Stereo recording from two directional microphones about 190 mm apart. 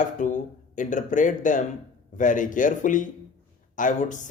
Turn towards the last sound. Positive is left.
turn(degrees=40)  # may be behind; listen again after turning